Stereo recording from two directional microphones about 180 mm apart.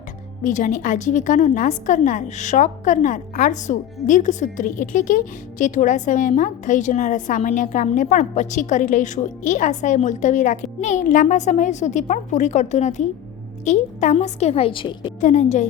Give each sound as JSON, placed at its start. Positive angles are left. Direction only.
{"t": 0.4, "sound": "a woman's voice", "side_deg": 45}
{"t": 15.2, "sound": "a woman's voice", "side_deg": 40}